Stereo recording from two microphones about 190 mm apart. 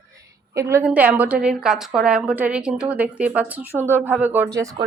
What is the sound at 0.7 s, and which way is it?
A woman's voice, 10° right (ahead or behind).